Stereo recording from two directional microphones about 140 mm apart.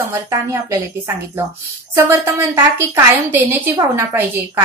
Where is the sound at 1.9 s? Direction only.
15° right (ahead or behind).